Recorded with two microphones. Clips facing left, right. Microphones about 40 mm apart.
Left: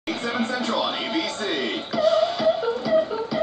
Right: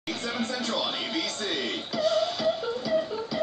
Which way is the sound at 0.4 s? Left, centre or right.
Centre.